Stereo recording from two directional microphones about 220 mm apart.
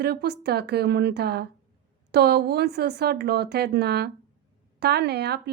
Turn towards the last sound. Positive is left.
turn(degrees=-45)  # may be behind; listen again after turning